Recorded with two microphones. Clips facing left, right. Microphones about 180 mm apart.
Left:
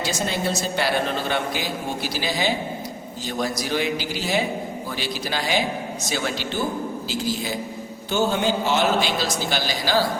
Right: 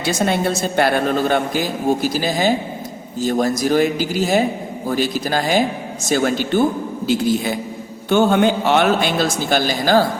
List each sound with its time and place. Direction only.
0.0 s a woman's voice: 60° right (ahead or behind)